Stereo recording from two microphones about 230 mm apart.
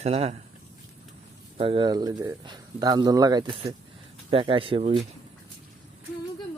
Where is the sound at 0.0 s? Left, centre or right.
Right.